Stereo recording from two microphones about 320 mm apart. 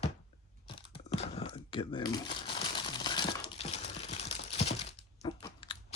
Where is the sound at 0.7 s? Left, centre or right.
Centre.